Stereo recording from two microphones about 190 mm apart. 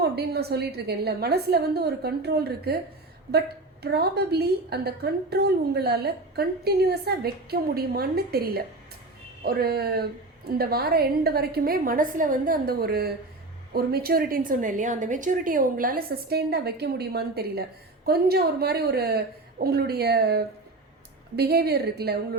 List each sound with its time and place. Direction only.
0.0 s a woman's voice: 55° right (ahead or behind)
3.8 s a woman's voice: 60° right (ahead or behind)